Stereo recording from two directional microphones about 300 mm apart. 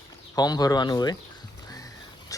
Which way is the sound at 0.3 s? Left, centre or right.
Centre.